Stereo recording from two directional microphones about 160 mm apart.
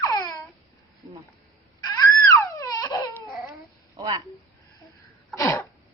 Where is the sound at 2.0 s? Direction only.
20° left (ahead or behind).